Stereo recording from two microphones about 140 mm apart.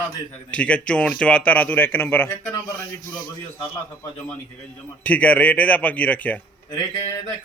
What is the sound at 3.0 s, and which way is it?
Speech, 30° left (ahead or behind).